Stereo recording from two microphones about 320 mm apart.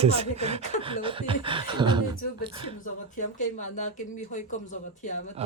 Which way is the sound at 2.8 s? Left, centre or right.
Left.